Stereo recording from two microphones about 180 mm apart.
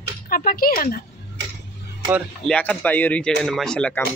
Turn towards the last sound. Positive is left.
turn(degrees=5)  # may be behind; listen again after turning